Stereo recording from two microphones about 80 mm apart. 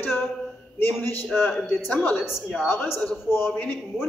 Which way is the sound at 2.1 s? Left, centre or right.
Centre.